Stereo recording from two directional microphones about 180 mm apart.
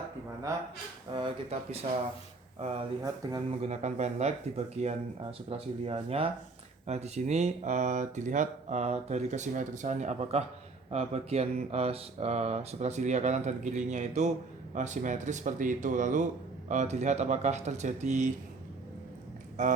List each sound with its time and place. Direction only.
1.1 s speech: 30° right (ahead or behind)